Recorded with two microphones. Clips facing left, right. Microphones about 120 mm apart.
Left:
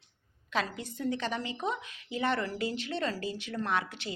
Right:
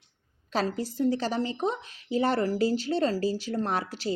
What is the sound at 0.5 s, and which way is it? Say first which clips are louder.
A woman's voice: right 5 dB; 35° right (ahead or behind).